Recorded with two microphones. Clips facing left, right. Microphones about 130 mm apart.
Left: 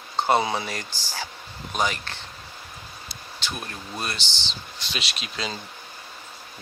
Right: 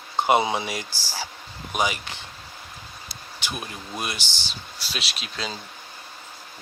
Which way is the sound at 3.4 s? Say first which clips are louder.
Right 1 dB; 10° right (ahead or behind).